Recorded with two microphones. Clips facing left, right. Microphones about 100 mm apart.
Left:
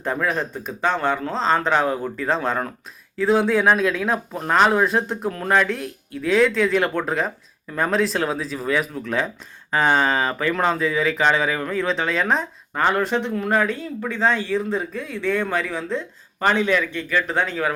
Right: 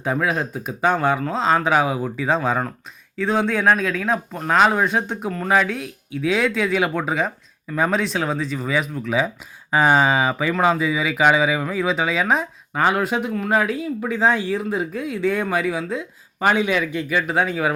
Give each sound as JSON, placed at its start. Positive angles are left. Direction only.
{"t": 0.0, "sound": "speech", "side_deg": -5}